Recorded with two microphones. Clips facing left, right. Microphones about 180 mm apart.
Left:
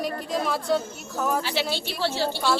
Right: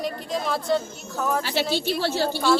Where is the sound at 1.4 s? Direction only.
45° right (ahead or behind).